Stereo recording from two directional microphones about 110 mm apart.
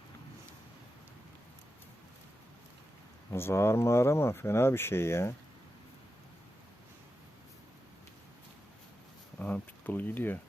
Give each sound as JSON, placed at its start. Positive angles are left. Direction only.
{"t": 3.3, "sound": "speech", "side_deg": 25}
{"t": 9.4, "sound": "speech", "side_deg": 15}